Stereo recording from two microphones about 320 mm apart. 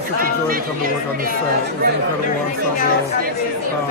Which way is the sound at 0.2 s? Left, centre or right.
Right.